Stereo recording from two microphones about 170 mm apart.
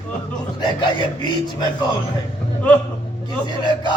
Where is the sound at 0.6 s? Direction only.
25° left (ahead or behind).